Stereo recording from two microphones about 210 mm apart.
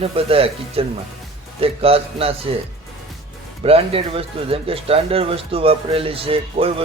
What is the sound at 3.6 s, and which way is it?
Speech, 25° right (ahead or behind).